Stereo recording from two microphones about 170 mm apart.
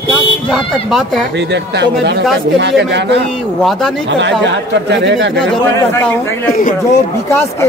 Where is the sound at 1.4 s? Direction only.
90° right.